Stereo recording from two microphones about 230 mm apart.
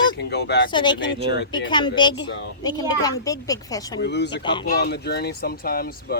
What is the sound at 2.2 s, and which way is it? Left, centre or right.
Speech, left.